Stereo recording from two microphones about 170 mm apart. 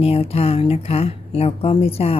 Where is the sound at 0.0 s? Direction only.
35° left (ahead or behind).